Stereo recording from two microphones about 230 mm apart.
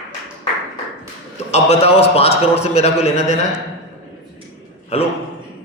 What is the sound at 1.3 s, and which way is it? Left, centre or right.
A man's voice, left.